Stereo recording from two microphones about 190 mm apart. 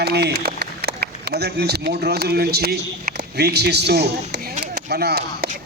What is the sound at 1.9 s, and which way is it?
A man's voice, 55° right (ahead or behind).